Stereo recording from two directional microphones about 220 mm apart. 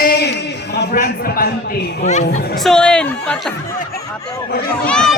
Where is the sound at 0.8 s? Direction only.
45° left (ahead or behind).